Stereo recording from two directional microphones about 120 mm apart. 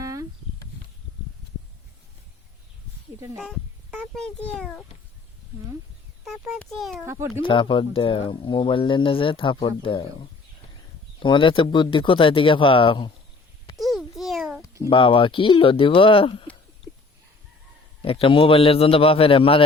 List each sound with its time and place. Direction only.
0.0 s a sound: 30° right (ahead or behind)
3.3 s a child's voice: 5° left (ahead or behind)
6.5 s a child's voice: centre (ahead or behind)
7.0 s speech: 20° right (ahead or behind)
7.4 s speech: 45° left (ahead or behind)
11.2 s speech: 45° left (ahead or behind)
13.7 s a sound: centre (ahead or behind)
14.8 s speech: 45° left (ahead or behind)
18.0 s speech: 50° left (ahead or behind)